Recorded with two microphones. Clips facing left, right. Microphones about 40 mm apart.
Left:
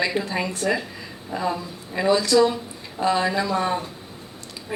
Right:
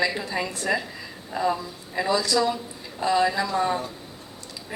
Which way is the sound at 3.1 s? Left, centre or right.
Left.